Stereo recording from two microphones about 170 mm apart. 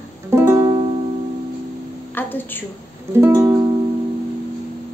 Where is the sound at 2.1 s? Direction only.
10° left (ahead or behind).